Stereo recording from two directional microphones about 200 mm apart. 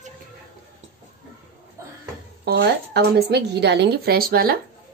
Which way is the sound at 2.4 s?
55° right (ahead or behind).